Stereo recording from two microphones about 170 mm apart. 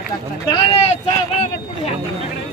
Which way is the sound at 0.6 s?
35° left (ahead or behind).